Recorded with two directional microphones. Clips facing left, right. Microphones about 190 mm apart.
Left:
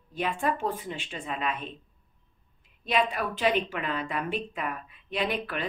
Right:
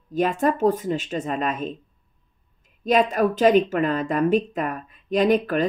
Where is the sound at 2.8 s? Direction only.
45° right (ahead or behind).